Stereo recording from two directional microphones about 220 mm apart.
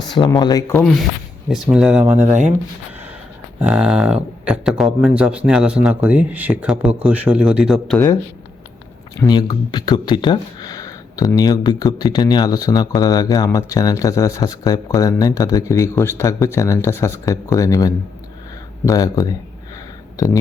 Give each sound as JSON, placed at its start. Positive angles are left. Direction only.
{"t": 0.1, "sound": "speech", "side_deg": 20}
{"t": 1.5, "sound": "speech", "side_deg": 0}
{"t": 3.6, "sound": "speech", "side_deg": -5}
{"t": 9.1, "sound": "speech", "side_deg": 15}